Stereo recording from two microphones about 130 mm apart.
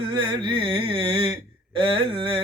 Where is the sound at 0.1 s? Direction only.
35° right (ahead or behind).